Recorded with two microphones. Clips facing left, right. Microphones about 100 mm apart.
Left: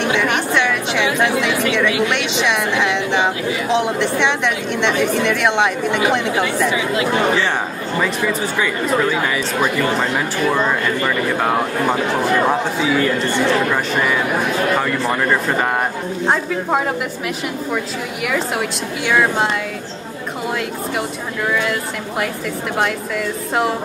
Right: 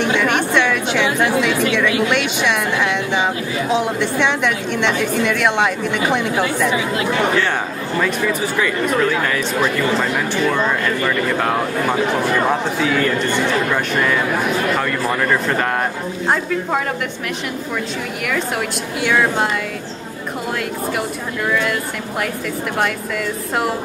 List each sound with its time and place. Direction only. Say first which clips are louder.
0.2 s a sound: right 1 dB; 10° left (ahead or behind)
3.7 s speech: left 1 dB; 5° right (ahead or behind)
8.0 s a man's voice: even; centre (ahead or behind)
19.0 s speech: left 1 dB; 5° left (ahead or behind)
21.5 s a man's voice: even; 5° left (ahead or behind)